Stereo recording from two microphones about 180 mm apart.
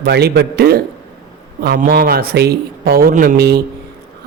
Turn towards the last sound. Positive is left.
turn(degrees=-60)  # may be behind; listen again after turning